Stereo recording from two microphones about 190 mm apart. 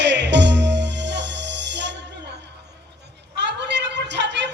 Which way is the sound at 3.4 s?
65° right (ahead or behind).